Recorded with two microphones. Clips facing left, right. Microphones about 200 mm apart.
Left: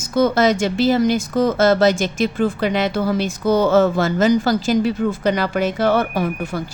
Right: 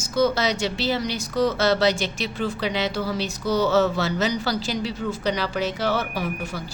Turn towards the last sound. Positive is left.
turn(degrees=55)  # may be behind; listen again after turning